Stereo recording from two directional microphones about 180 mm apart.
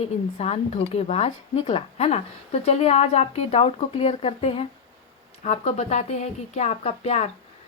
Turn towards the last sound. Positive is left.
turn(degrees=35)  # may be behind; listen again after turning